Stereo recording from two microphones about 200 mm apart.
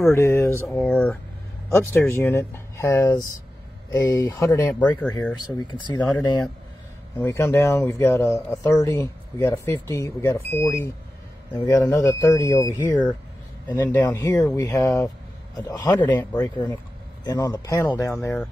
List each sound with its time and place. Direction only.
0.0 s speech: 15° left (ahead or behind)
7.2 s a man's voice: 10° left (ahead or behind)
18.1 s speech: 5° left (ahead or behind)